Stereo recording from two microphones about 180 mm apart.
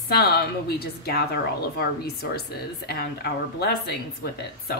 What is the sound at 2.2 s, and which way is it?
A woman's voice, 65° left (ahead or behind).